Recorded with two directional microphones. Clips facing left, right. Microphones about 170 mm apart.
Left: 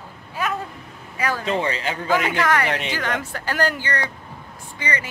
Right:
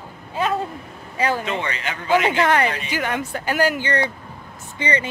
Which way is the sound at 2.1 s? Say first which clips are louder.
Right 3 dB; 25° right (ahead or behind).